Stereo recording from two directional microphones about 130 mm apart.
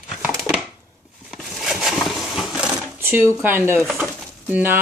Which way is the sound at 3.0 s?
20° right (ahead or behind).